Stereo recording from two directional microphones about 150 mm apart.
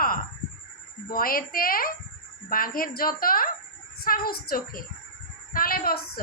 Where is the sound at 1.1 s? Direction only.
75° left (ahead or behind).